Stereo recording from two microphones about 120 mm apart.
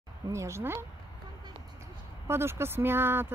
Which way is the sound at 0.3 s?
25° right (ahead or behind).